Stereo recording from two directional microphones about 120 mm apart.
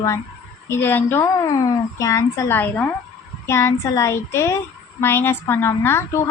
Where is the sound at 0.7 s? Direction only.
20° left (ahead or behind).